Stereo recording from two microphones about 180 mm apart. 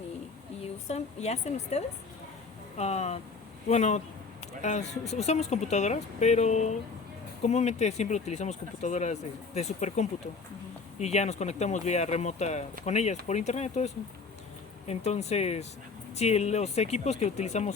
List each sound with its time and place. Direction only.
0.6 s a woman's voice: 35° left (ahead or behind)